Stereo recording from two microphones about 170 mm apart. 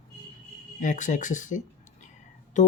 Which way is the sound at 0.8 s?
45° left (ahead or behind).